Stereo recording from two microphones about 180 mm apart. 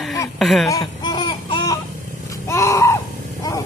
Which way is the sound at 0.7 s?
25° left (ahead or behind).